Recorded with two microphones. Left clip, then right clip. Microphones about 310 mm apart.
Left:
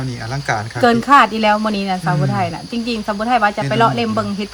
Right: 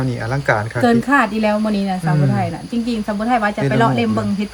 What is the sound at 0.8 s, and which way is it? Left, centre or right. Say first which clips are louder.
Speech: left 5 dB; centre.